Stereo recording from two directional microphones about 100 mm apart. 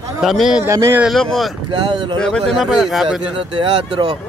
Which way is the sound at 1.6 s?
55° right (ahead or behind).